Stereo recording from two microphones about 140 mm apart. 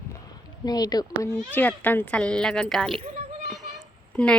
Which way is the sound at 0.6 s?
25° left (ahead or behind).